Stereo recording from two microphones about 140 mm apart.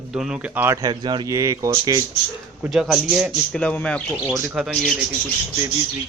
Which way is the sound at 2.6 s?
Centre (ahead or behind).